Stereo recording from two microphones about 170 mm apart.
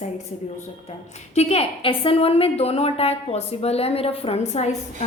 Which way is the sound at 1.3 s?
35° left (ahead or behind).